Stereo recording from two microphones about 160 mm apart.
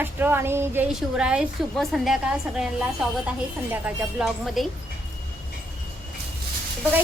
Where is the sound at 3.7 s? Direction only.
10° right (ahead or behind).